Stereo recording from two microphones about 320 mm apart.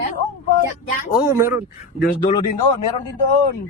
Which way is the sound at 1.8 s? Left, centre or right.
Left.